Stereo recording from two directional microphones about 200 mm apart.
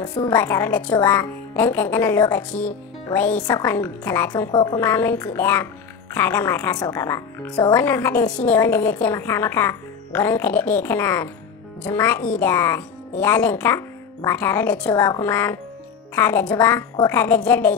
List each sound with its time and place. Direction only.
0.0 s a woman's voice: 20° left (ahead or behind)